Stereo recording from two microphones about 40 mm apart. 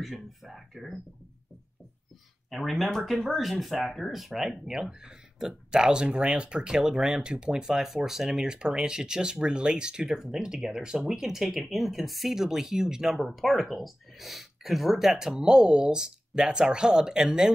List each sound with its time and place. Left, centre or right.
0.0 s speech: centre
2.5 s speech: centre
15.4 s speech: right